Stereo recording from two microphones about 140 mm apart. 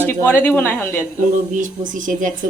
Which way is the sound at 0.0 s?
15° left (ahead or behind).